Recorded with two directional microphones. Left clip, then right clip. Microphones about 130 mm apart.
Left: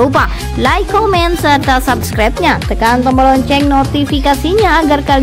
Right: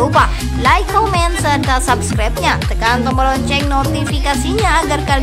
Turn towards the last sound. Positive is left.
turn(degrees=30)  # may be behind; listen again after turning